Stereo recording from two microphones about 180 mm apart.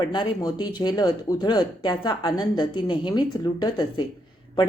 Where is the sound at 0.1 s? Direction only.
25° left (ahead or behind).